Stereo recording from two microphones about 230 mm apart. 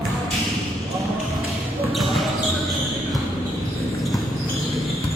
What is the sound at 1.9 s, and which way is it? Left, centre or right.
Basketball bounce, centre.